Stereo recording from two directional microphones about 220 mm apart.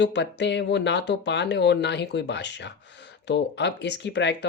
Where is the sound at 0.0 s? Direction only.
55° left (ahead or behind).